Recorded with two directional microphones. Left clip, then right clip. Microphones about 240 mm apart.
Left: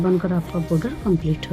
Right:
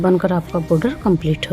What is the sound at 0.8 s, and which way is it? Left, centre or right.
Speech, right.